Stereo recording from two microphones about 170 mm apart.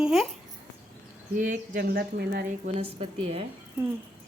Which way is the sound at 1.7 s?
70° right (ahead or behind).